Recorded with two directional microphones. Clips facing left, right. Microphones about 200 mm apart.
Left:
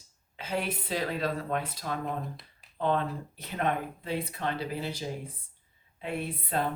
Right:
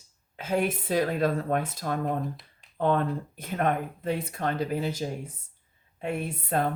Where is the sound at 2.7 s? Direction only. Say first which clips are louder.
Right 4 dB; 50° right (ahead or behind).